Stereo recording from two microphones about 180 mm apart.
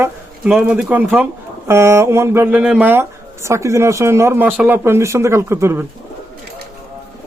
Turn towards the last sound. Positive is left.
turn(degrees=-15)  # may be behind; listen again after turning